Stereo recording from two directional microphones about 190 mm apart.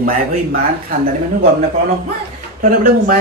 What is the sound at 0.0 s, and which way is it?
Speech, 50° right (ahead or behind).